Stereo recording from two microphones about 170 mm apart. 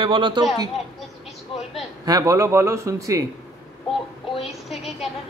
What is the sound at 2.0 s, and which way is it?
Speech, 20° right (ahead or behind).